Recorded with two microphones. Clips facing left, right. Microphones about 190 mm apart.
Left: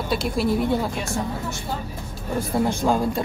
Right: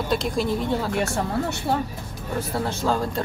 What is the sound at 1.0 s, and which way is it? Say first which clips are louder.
Speech: right 3 dB; 65° right (ahead or behind).